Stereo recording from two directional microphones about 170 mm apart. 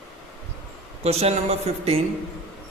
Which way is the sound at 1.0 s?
40° right (ahead or behind).